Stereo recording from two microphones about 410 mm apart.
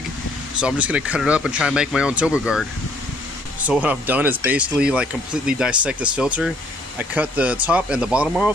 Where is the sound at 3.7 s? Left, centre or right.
Centre.